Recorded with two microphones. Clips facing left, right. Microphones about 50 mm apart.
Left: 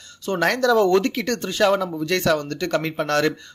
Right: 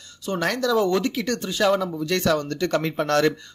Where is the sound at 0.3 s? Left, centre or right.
Left.